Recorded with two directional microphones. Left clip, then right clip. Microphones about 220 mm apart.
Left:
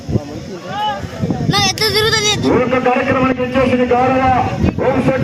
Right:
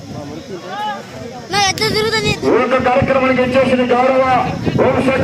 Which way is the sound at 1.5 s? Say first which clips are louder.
Even; 20° left (ahead or behind).